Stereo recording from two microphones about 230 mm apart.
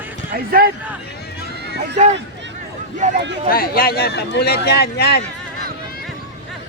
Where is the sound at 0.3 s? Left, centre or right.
Right.